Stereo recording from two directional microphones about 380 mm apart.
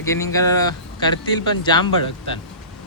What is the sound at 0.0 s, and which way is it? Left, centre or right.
Speech, centre.